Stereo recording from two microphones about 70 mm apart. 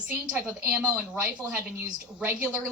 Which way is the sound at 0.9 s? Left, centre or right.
Centre.